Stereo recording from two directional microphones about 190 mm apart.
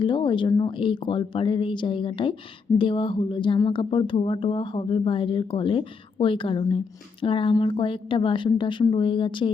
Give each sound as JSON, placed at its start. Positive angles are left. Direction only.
{"t": 0.0, "sound": "speech", "side_deg": 25}